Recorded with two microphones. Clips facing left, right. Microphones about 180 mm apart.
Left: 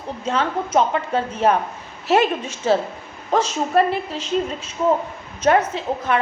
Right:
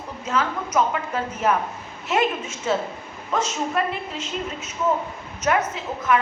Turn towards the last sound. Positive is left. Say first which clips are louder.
# left 1 dB
turn(degrees=30)  # may be behind; listen again after turning